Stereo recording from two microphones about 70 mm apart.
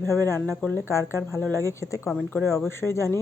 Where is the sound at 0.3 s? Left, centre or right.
Left.